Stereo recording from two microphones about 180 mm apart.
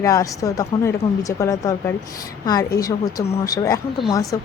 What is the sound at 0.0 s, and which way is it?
A woman's voice, 20° left (ahead or behind).